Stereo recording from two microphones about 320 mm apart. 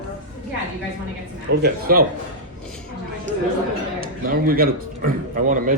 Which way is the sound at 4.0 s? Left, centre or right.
Right.